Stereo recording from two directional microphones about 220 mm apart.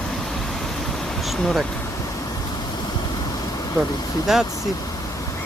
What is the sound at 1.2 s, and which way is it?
Vehicle, centre (ahead or behind).